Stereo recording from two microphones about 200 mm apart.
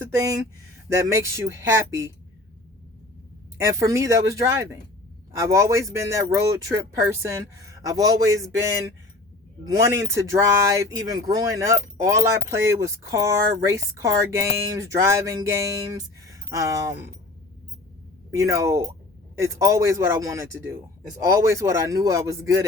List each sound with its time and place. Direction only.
0.9 s speech: 15° right (ahead or behind)
3.7 s speech: 15° right (ahead or behind)
18.3 s speech: 15° right (ahead or behind)